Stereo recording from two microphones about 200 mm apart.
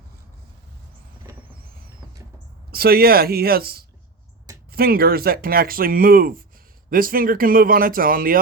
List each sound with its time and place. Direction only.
2.7 s speech: 50° right (ahead or behind)